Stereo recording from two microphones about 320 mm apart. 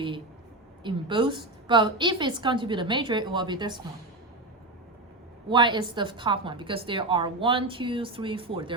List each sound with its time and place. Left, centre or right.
0.9 s a woman's voice: centre
5.5 s a woman's voice: centre